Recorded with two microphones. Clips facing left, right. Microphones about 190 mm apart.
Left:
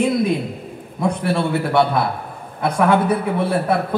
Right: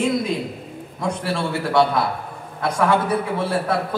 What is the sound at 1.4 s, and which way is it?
A man's voice, 60° left (ahead or behind).